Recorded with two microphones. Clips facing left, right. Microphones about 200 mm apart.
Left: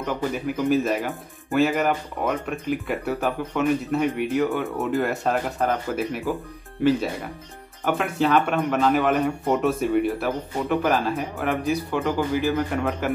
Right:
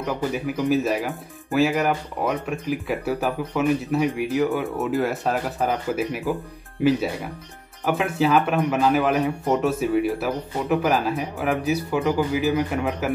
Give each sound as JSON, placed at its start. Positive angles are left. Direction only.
{"t": 0.0, "sound": "speech", "side_deg": -10}
{"t": 1.0, "sound": "speech", "side_deg": 0}
{"t": 2.9, "sound": "speech", "side_deg": 0}
{"t": 5.9, "sound": "speech", "side_deg": -15}
{"t": 9.6, "sound": "speech", "side_deg": 0}
{"t": 11.3, "sound": "speech", "side_deg": 0}